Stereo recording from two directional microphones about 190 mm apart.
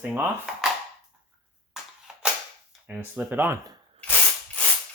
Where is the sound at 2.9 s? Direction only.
10° right (ahead or behind).